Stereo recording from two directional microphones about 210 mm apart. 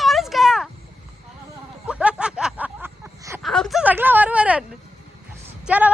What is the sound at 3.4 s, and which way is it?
Speech, centre (ahead or behind).